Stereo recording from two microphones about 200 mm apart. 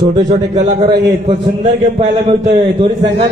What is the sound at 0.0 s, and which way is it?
Speech, 20° right (ahead or behind).